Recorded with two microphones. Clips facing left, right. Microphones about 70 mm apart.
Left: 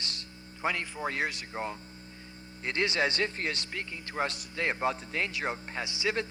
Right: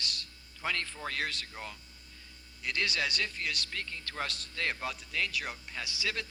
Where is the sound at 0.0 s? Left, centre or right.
Left.